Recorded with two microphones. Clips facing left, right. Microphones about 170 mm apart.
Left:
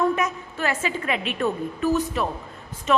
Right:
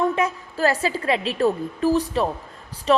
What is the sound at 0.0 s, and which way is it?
A woman's voice, 30° right (ahead or behind).